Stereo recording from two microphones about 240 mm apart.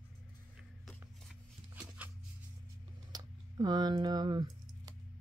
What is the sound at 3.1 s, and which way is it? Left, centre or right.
Typing, centre.